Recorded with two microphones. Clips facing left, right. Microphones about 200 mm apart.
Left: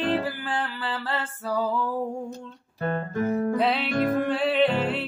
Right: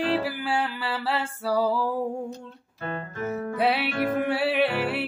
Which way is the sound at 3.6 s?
10° right (ahead or behind).